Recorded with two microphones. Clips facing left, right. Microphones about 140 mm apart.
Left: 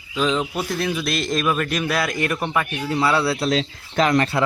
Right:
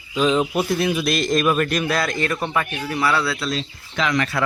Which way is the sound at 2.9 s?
25° left (ahead or behind).